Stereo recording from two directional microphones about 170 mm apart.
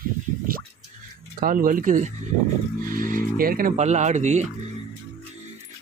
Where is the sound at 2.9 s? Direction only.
55° right (ahead or behind).